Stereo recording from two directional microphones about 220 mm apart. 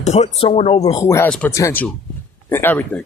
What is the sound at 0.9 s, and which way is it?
Speech, 15° left (ahead or behind).